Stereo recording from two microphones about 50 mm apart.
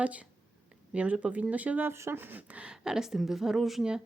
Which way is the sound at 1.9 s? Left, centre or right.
Right.